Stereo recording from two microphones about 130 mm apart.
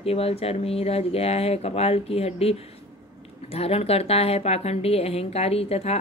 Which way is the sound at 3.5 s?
50° left (ahead or behind).